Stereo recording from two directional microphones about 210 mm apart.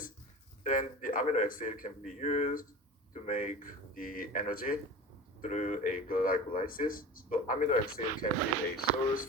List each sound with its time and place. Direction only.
0.6 s speech: 40° left (ahead or behind)